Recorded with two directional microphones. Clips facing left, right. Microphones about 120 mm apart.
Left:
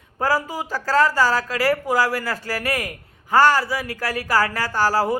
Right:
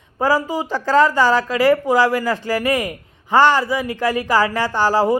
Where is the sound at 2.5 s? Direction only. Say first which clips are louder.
Right 6 dB; 15° right (ahead or behind).